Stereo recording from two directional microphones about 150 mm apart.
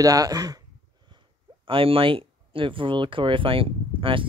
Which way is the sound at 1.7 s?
35° right (ahead or behind).